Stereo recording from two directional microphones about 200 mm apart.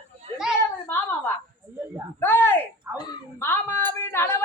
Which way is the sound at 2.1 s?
10° left (ahead or behind).